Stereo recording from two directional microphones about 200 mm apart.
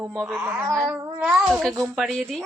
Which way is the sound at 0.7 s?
Centre (ahead or behind).